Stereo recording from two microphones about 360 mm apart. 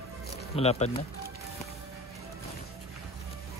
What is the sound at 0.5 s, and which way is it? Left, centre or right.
Speech, centre.